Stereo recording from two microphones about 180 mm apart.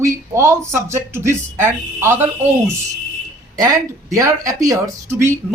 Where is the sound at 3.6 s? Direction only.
20° right (ahead or behind).